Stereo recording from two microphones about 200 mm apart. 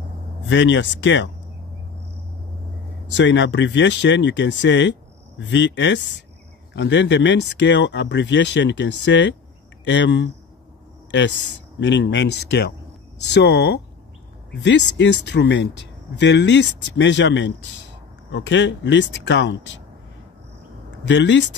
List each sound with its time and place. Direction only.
0.5 s speech: 65° left (ahead or behind)
3.2 s speech: 65° left (ahead or behind)
21.0 s speech: 65° left (ahead or behind)